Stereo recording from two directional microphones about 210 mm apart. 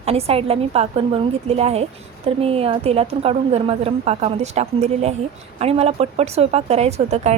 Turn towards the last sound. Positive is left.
turn(degrees=-30)  # may be behind; listen again after turning